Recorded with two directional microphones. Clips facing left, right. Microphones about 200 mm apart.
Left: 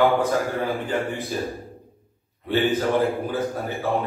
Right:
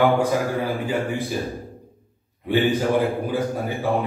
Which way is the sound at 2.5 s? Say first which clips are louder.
Right 1 dB; 15° right (ahead or behind).